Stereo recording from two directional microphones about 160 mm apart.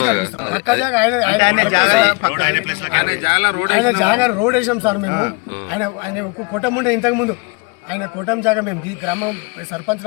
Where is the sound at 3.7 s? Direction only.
15° right (ahead or behind).